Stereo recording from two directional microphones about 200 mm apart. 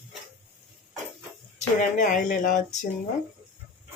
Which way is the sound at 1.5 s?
40° left (ahead or behind).